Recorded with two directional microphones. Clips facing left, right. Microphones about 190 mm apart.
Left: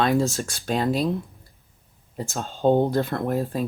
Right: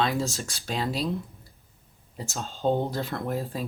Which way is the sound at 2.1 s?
55° left (ahead or behind).